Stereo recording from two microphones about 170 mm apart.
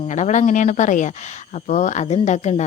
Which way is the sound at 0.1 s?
45° left (ahead or behind).